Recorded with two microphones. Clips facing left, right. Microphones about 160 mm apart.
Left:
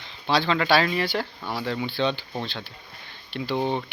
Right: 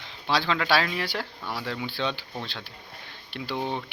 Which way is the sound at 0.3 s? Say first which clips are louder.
Left 3 dB; centre (ahead or behind).